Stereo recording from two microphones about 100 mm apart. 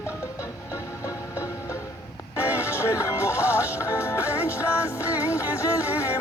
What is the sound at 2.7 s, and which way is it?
Music, 30° left (ahead or behind).